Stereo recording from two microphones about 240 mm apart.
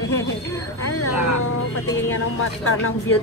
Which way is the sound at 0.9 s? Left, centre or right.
Left.